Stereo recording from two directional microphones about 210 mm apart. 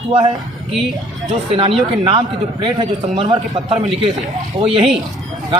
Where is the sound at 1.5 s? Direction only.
25° right (ahead or behind).